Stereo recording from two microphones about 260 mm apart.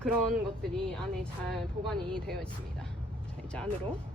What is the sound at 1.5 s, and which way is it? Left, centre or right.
Speech, centre.